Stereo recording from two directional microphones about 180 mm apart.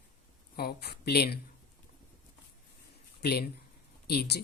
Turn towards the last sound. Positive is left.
turn(degrees=60)  # may be behind; listen again after turning